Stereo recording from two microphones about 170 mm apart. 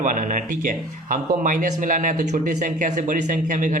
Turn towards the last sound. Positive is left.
turn(degrees=-50)  # may be behind; listen again after turning